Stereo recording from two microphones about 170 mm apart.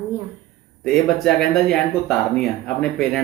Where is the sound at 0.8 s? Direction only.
5° left (ahead or behind).